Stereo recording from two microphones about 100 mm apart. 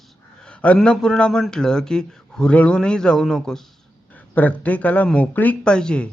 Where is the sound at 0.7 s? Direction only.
Centre (ahead or behind).